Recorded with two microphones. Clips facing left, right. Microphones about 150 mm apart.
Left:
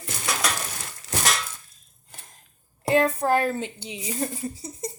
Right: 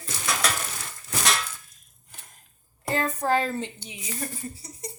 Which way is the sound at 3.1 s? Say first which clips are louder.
Left 2 dB; 10° left (ahead or behind).